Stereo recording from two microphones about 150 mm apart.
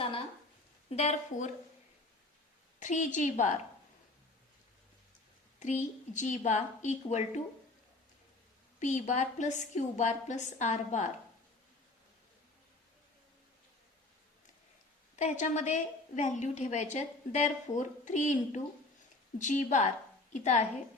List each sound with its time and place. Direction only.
0.9 s a woman's voice: 45° left (ahead or behind)
2.8 s a woman's voice: 55° left (ahead or behind)
5.5 s a woman's voice: 55° left (ahead or behind)
8.8 s a woman's voice: 50° left (ahead or behind)
15.1 s a woman's voice: 55° left (ahead or behind)